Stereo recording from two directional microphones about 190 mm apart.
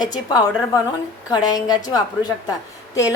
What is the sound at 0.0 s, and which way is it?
A woman's voice, 20° left (ahead or behind).